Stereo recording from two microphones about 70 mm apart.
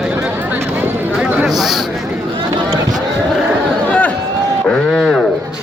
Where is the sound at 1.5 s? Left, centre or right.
Centre.